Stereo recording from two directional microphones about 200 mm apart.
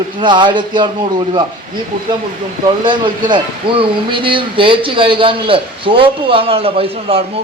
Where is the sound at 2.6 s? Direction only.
25° right (ahead or behind).